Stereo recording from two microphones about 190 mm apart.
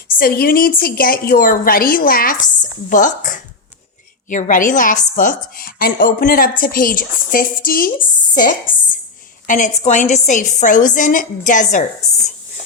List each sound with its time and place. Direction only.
0.2 s a woman's voice: 50° left (ahead or behind)